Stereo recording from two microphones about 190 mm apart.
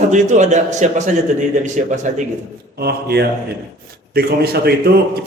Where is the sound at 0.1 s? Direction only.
40° right (ahead or behind).